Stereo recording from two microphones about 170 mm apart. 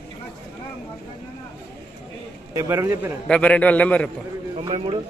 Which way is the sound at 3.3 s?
10° left (ahead or behind).